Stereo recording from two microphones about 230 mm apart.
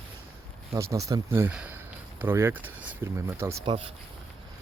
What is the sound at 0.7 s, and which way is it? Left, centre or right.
Speech, centre.